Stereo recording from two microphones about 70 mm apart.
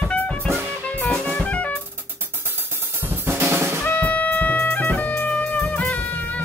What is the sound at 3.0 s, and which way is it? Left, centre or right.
Drum kit, right.